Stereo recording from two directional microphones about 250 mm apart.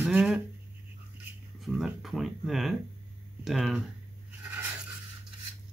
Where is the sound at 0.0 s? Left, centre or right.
Centre.